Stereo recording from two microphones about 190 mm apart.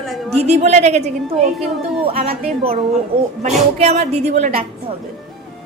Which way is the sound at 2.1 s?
30° right (ahead or behind).